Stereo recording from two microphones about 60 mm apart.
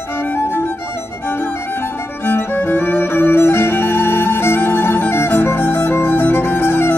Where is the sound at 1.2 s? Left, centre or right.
Left.